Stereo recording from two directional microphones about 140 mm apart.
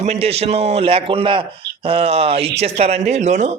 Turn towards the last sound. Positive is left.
turn(degrees=-55)  # may be behind; listen again after turning